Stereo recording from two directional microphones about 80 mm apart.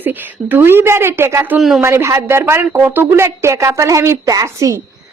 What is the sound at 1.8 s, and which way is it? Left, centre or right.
A woman's voice, right.